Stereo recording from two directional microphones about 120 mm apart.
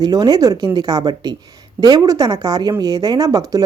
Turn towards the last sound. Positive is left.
turn(degrees=-30)  # may be behind; listen again after turning